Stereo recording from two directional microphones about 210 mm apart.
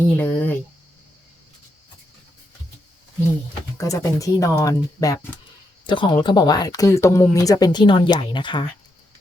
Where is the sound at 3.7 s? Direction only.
15° left (ahead or behind).